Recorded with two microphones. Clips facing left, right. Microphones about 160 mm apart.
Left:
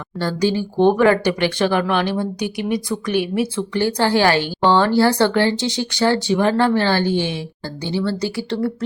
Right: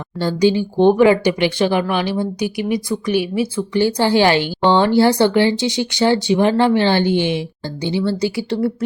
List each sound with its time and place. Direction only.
0.2 s speech: 15° right (ahead or behind)